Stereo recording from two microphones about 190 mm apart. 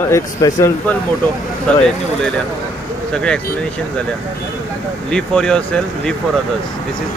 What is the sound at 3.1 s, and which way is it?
Speech, 5° left (ahead or behind).